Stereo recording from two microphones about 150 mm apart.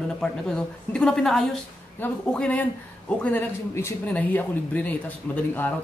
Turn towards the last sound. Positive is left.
turn(degrees=10)  # may be behind; listen again after turning